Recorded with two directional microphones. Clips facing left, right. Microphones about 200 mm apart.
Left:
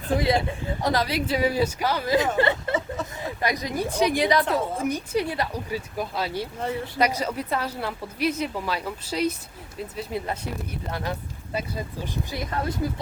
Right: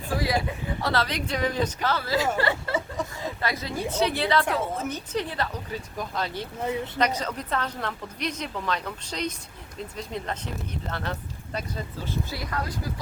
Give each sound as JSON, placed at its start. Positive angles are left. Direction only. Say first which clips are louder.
{"t": 0.1, "sound": "speech", "louder": "left 4 dB", "side_deg": 25}